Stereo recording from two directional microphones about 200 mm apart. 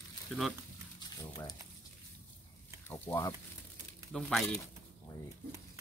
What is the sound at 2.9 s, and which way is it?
Speech, 10° left (ahead or behind).